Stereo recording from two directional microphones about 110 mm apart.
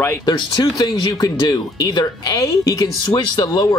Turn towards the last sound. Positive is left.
turn(degrees=35)  # may be behind; listen again after turning